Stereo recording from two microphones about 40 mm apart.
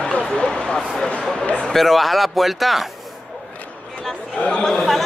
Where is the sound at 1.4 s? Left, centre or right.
Left.